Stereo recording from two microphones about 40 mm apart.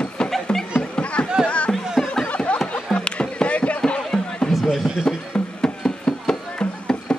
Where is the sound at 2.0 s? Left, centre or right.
Centre.